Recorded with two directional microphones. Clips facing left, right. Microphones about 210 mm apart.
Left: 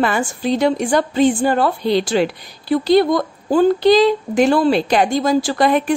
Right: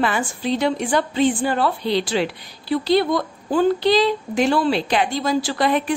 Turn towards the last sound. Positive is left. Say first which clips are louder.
# left 4 dB
turn(degrees=45)  # may be behind; listen again after turning